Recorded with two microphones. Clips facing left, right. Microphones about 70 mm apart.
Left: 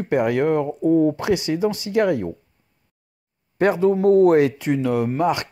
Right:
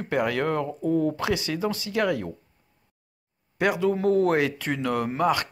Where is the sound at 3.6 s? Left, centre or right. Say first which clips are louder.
Left 6 dB; left.